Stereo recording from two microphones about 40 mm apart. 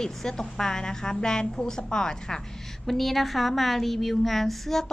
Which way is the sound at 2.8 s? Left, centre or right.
Centre.